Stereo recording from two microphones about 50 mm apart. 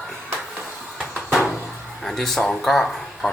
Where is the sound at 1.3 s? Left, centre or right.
Centre.